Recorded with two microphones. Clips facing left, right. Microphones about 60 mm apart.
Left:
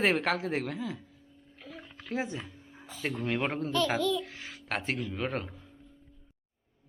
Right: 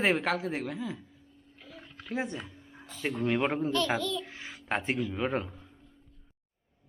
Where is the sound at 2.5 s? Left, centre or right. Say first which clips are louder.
Left 1 dB; centre.